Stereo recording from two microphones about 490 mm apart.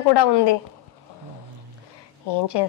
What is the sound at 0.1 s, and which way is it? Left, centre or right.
Speech, left.